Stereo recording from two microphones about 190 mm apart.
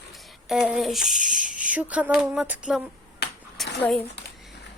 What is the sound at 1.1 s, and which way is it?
Speech, 40° right (ahead or behind).